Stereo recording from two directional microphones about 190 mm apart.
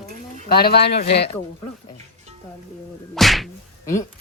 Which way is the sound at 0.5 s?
55° left (ahead or behind).